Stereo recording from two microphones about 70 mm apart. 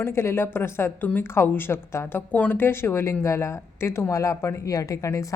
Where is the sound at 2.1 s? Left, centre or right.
Left.